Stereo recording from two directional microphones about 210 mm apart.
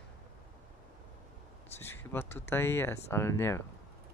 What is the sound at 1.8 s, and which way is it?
Speech, 10° left (ahead or behind).